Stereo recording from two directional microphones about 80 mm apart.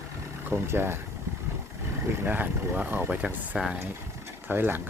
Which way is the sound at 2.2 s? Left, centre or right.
Right.